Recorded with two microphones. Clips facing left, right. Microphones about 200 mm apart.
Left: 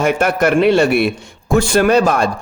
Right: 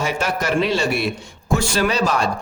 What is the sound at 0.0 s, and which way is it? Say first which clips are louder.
A man's voice: left 8 dB; 55° left (ahead or behind).